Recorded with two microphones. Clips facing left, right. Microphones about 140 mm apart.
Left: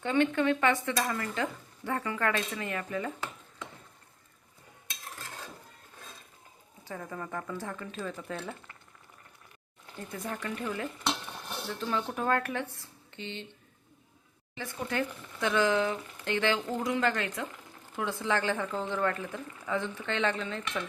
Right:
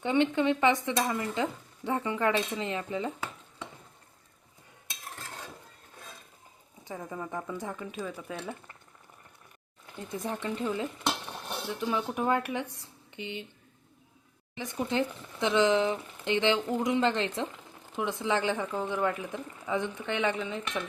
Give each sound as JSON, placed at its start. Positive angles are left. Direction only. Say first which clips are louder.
{"t": 0.0, "sound": "speech", "louder": "right 1 dB", "side_deg": -20}
{"t": 6.8, "sound": "speech", "louder": "right 1 dB", "side_deg": -15}
{"t": 10.2, "sound": "speech", "louder": "right 3 dB", "side_deg": -20}
{"t": 14.5, "sound": "speech", "louder": "right 3 dB", "side_deg": -15}